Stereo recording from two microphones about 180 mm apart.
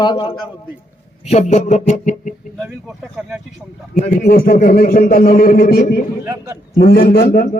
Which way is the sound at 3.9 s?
45° left (ahead or behind).